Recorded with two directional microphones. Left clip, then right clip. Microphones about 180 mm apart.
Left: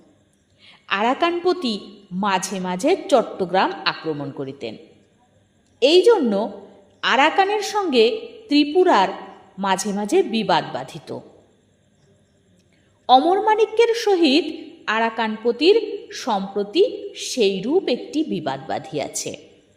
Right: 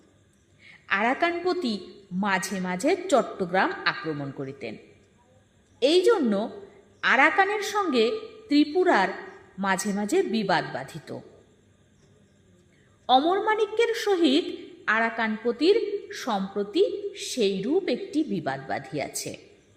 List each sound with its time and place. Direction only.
0.6 s a woman's voice: 20° left (ahead or behind)
5.8 s a woman's voice: 20° left (ahead or behind)
13.1 s a woman's voice: 20° left (ahead or behind)